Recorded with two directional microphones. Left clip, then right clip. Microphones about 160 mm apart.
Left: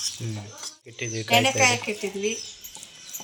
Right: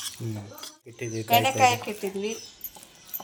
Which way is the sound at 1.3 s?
45° right (ahead or behind).